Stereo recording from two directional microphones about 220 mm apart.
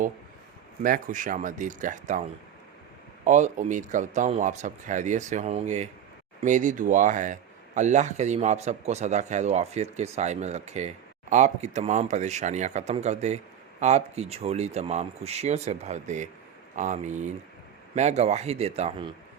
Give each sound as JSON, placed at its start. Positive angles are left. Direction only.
{"t": 0.8, "sound": "speech", "side_deg": -40}
{"t": 3.2, "sound": "speech", "side_deg": -35}